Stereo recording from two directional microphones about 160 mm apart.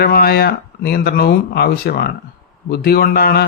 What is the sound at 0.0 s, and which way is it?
Speech, 70° left (ahead or behind).